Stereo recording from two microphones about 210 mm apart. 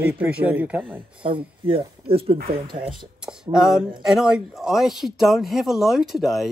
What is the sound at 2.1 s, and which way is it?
Speech, 25° right (ahead or behind).